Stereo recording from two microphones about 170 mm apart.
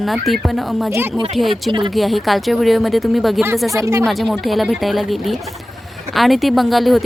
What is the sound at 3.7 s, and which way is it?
Speech, 15° right (ahead or behind).